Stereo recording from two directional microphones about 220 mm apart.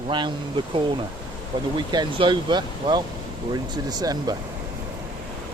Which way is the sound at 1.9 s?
20° right (ahead or behind).